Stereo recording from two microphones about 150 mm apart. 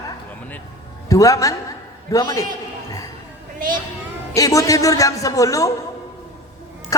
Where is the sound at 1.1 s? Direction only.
20° left (ahead or behind).